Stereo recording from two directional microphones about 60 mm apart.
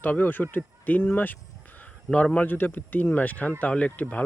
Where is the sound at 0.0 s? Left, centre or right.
Left.